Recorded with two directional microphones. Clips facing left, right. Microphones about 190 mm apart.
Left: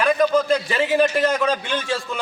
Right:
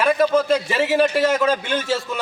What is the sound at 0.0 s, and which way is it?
A man's voice, 5° right (ahead or behind).